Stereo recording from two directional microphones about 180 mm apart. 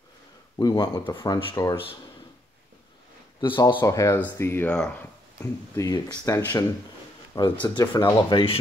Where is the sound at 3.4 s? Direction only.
25° left (ahead or behind).